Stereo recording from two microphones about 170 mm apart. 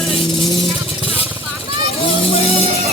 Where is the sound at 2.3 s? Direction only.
35° left (ahead or behind).